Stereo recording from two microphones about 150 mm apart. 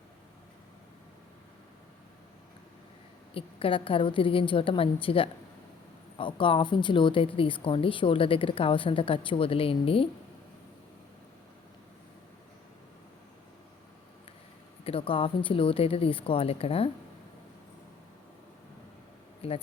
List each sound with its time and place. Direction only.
3.3 s speech: 35° left (ahead or behind)
14.8 s speech: 40° left (ahead or behind)
19.4 s speech: 40° left (ahead or behind)